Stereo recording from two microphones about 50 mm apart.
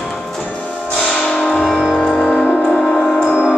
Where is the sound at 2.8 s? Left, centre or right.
Centre.